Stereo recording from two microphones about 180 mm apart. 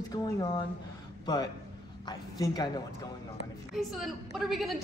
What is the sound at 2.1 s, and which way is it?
Speech, 20° left (ahead or behind).